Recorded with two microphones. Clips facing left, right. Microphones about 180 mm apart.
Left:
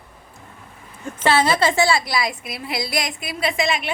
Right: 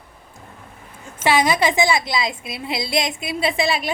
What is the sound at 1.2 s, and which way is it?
A woman's voice, 15° right (ahead or behind).